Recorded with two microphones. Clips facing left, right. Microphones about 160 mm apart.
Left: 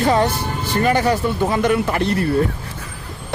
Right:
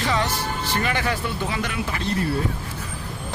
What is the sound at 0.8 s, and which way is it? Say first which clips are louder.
Speech: left 12 dB; 40° left (ahead or behind).